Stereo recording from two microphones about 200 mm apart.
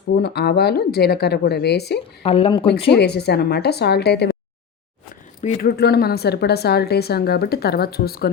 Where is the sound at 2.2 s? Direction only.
30° left (ahead or behind).